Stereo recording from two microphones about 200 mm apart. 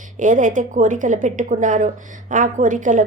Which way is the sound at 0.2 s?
40° right (ahead or behind).